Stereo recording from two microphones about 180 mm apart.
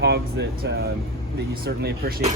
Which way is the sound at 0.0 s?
65° right (ahead or behind).